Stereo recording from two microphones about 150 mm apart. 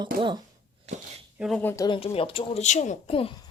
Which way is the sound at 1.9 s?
40° left (ahead or behind).